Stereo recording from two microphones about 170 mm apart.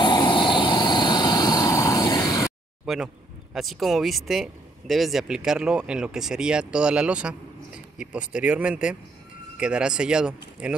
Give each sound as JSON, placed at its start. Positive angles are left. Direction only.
{"t": 0.0, "sound": "vehicle", "side_deg": 25}
{"t": 2.8, "sound": "speech", "side_deg": -5}